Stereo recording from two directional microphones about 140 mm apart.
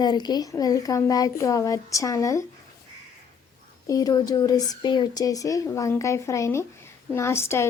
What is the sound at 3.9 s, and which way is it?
A woman's voice, 25° left (ahead or behind).